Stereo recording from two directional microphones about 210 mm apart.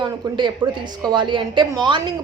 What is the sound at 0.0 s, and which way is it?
A woman's voice, 20° right (ahead or behind).